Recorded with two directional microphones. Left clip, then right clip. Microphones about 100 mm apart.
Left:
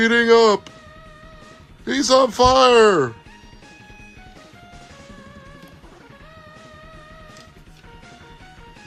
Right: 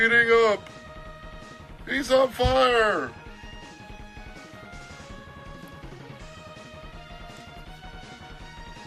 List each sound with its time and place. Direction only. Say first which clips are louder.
0.0 s speech: left 5 dB; 35° left (ahead or behind)
1.9 s speech: left 6 dB; 40° left (ahead or behind)